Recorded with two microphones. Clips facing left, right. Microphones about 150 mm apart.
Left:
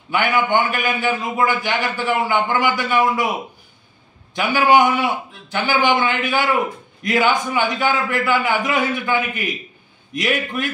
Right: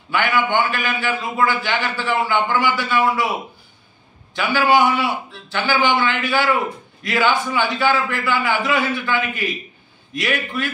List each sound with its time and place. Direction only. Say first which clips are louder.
0.1 s a man's voice: left 1 dB; 15° left (ahead or behind)
4.4 s a man's voice: left 2 dB; 15° left (ahead or behind)